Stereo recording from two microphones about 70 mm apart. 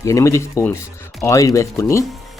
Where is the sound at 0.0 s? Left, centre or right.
Left.